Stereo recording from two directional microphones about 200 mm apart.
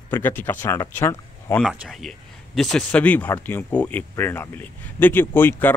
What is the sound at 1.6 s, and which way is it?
Speech, centre (ahead or behind).